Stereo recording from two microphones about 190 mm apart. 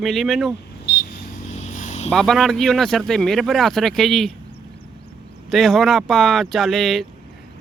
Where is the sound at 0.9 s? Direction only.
60° left (ahead or behind).